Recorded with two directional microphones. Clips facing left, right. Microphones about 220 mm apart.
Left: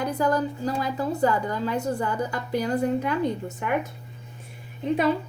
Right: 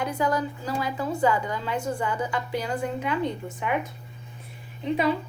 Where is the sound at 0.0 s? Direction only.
35° left (ahead or behind).